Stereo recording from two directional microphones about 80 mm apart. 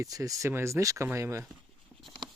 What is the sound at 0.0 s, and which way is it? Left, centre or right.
Speech, right.